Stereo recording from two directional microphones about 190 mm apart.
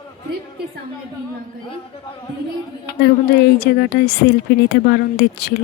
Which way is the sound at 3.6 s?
55° left (ahead or behind).